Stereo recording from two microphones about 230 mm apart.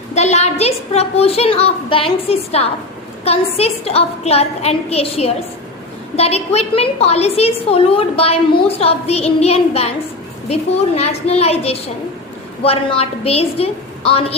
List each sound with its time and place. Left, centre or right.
0.1 s a woman's voice: left